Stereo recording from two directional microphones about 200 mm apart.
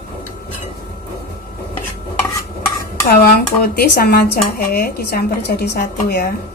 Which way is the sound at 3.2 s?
50° left (ahead or behind).